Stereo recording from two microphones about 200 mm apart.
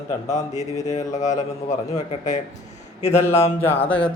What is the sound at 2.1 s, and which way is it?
Speech, 35° left (ahead or behind).